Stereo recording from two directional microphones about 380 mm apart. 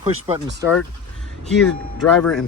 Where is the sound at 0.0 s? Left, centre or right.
Centre.